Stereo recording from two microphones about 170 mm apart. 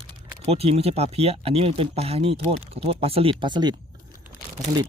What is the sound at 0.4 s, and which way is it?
Speech, 35° right (ahead or behind).